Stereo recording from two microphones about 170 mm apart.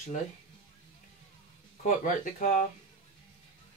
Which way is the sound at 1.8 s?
50° left (ahead or behind).